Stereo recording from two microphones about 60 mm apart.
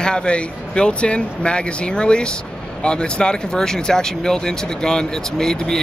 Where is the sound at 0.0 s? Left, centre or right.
Centre.